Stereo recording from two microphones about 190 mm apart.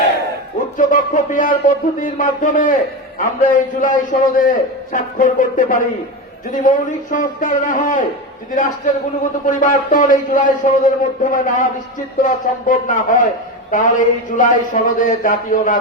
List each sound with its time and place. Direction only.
0.8 s a man's voice: 45° left (ahead or behind)